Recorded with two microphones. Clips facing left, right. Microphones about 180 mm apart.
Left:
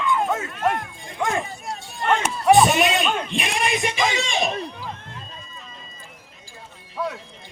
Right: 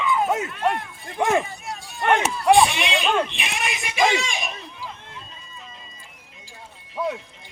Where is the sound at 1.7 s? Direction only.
30° left (ahead or behind).